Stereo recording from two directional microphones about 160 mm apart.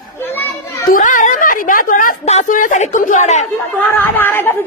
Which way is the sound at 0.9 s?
55° left (ahead or behind).